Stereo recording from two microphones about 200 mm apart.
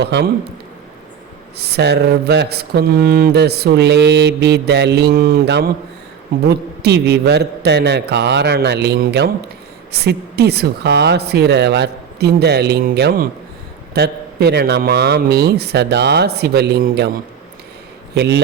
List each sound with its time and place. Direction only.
0.0 s mantra: 55° right (ahead or behind)
1.5 s mantra: 55° right (ahead or behind)
13.9 s speech: 55° right (ahead or behind)
18.1 s mantra: 55° right (ahead or behind)